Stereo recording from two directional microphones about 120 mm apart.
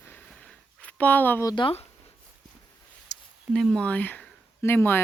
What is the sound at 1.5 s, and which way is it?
Speech, 40° left (ahead or behind).